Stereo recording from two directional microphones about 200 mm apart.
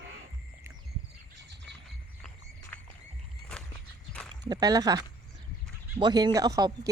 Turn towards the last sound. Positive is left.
turn(degrees=-20)  # may be behind; listen again after turning